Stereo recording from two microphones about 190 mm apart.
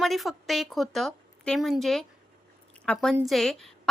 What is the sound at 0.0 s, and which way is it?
A woman's voice, centre (ahead or behind).